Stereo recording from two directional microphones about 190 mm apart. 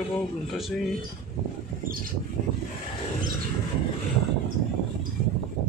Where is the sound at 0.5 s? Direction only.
Centre (ahead or behind).